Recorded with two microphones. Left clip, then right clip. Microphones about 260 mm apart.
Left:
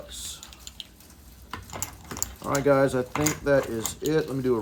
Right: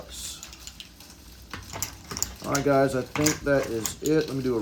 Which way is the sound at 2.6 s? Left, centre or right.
Centre.